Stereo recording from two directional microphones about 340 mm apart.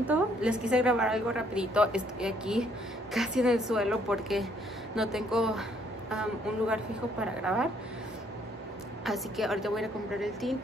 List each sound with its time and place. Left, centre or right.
0.0 s a woman's voice: centre
9.0 s a woman's voice: centre